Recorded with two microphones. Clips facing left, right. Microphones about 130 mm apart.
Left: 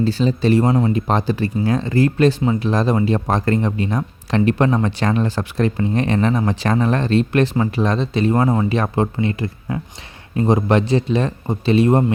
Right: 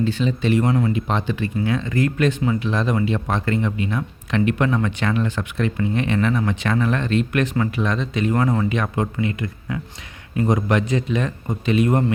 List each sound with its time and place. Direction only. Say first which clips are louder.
0.0 s speech: left 4 dB; 35° left (ahead or behind)